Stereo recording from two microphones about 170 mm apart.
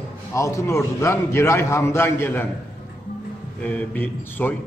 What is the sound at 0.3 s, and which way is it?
A man's voice, 20° left (ahead or behind).